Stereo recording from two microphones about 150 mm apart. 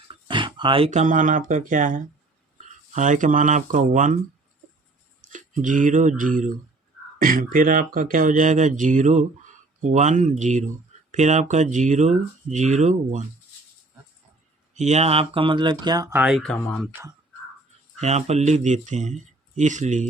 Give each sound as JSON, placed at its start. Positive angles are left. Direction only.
{"t": 0.1, "sound": "a sound", "side_deg": -35}
{"t": 0.9, "sound": "speech", "side_deg": -55}
{"t": 5.2, "sound": "speech", "side_deg": -60}
{"t": 14.7, "sound": "speech", "side_deg": -50}
{"t": 16.1, "sound": "speech", "side_deg": -5}
{"t": 16.4, "sound": "speech", "side_deg": 5}
{"t": 18.0, "sound": "speech", "side_deg": -45}